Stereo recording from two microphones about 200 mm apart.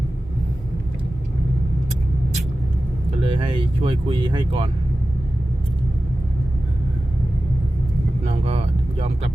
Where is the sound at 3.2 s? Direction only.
25° right (ahead or behind).